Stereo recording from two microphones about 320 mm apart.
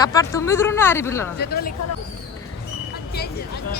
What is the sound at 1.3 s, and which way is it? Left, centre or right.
Speech, left.